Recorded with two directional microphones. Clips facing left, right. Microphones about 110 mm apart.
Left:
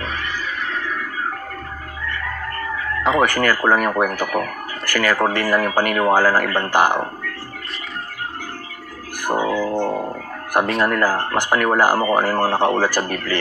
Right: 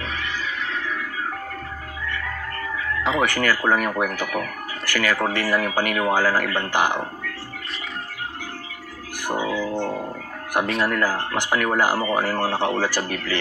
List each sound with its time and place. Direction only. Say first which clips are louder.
0.0 s music: left 2 dB; 45° left (ahead or behind)
2.0 s speech: left 3 dB; 50° left (ahead or behind)
9.2 s music: left 5 dB; 45° left (ahead or behind)
10.8 s speech: left 4 dB; 45° left (ahead or behind)